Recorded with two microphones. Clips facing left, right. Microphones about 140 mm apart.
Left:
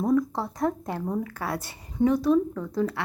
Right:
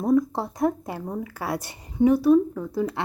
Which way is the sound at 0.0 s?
15° right (ahead or behind).